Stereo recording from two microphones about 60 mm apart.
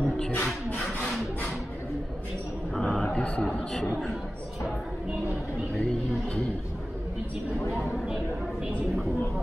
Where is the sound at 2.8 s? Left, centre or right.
Centre.